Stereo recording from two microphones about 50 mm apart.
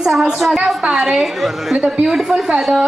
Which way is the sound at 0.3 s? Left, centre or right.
Centre.